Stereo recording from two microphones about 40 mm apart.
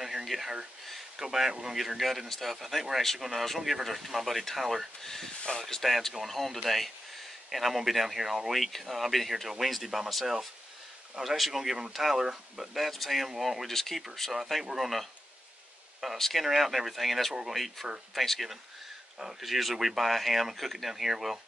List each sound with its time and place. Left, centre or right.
0.0 s a sound: centre
1.1 s speech: centre
1.5 s speech: right
2.0 s speech: centre
5.0 s speech: centre
5.8 s speech: centre
16.2 s speech: centre
16.4 s speech: centre